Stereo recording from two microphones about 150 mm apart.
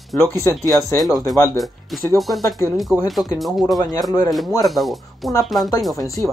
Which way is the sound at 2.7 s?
Centre (ahead or behind).